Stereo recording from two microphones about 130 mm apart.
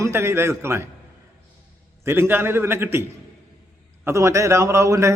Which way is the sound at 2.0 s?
15° right (ahead or behind).